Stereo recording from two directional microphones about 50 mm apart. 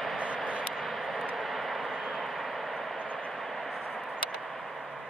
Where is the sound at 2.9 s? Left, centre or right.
Left.